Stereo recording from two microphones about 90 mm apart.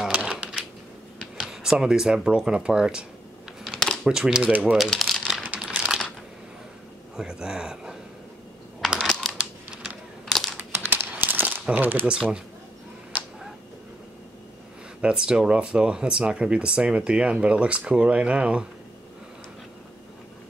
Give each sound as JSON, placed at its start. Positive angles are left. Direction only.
{"t": 0.0, "sound": "typewriter", "side_deg": -10}
{"t": 1.4, "sound": "speech", "side_deg": -5}
{"t": 4.9, "sound": "crumpling", "side_deg": 0}
{"t": 5.4, "sound": "crumpling", "side_deg": -15}
{"t": 7.2, "sound": "speech", "side_deg": -10}
{"t": 10.2, "sound": "typing", "side_deg": 0}
{"t": 10.6, "sound": "crumpling", "side_deg": -25}
{"t": 11.7, "sound": "speech", "side_deg": -20}
{"t": 15.0, "sound": "speech", "side_deg": -10}